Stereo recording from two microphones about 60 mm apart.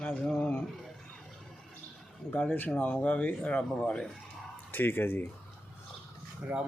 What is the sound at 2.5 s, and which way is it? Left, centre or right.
Speech, left.